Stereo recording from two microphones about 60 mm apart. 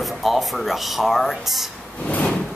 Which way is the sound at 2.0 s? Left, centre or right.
Centre.